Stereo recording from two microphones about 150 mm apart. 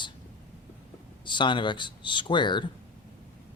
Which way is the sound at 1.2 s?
30° left (ahead or behind).